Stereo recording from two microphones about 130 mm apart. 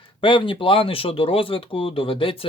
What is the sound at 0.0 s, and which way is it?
Speech, 40° left (ahead or behind).